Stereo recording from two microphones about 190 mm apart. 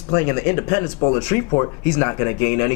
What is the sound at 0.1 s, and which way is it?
Speech, 15° left (ahead or behind).